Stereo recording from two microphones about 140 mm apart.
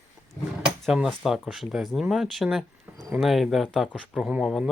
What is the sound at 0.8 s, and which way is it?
Speech, 5° right (ahead or behind).